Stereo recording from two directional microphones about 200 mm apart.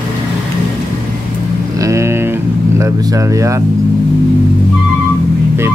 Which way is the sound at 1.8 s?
15° right (ahead or behind).